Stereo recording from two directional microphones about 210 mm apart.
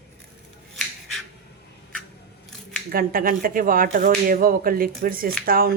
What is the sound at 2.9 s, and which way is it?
Speech, 45° right (ahead or behind).